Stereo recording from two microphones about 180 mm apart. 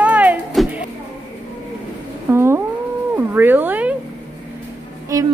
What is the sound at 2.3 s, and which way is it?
Music, 15° right (ahead or behind).